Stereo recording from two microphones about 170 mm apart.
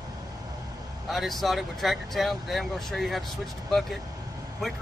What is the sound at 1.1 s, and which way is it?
Speech, centre (ahead or behind).